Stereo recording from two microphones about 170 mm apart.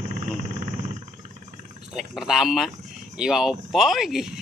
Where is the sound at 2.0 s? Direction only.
Centre (ahead or behind).